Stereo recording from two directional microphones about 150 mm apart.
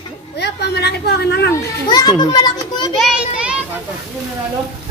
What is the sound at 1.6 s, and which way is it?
Children playing, 30° left (ahead or behind).